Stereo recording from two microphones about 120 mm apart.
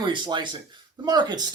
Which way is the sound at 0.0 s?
40° right (ahead or behind).